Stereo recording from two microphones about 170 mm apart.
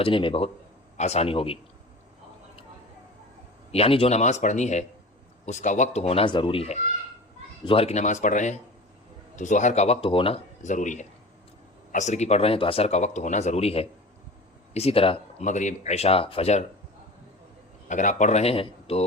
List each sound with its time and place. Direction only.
0.0 s speech: 30° left (ahead or behind)
3.7 s speech: 35° left (ahead or behind)
17.8 s speech: 45° left (ahead or behind)